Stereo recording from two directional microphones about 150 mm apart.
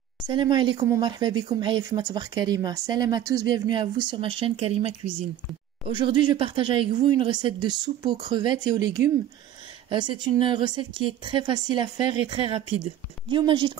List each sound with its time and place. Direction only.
0.3 s speech: 30° right (ahead or behind)